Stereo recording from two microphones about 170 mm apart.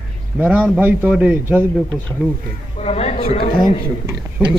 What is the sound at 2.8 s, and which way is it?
Speech, 35° left (ahead or behind).